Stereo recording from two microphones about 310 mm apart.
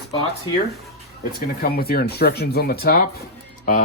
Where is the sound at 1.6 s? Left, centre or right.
Left.